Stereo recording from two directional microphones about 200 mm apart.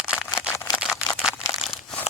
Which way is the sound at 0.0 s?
Centre (ahead or behind).